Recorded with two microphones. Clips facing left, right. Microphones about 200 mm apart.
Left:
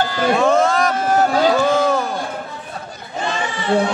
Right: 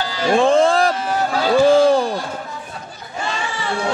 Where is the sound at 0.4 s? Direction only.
30° right (ahead or behind).